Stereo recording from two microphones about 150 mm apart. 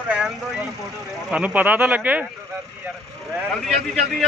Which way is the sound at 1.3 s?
10° right (ahead or behind).